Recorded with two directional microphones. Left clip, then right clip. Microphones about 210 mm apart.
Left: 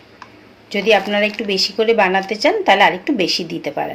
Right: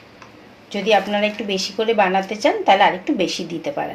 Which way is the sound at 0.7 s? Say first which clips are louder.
Left 3 dB; 20° left (ahead or behind).